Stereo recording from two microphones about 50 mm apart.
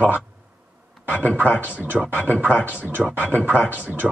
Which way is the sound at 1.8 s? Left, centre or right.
Right.